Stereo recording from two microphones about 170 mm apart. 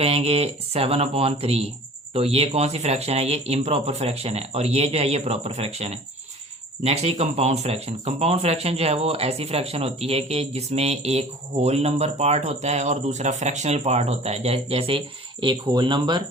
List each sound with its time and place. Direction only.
0.0 s speech: 35° right (ahead or behind)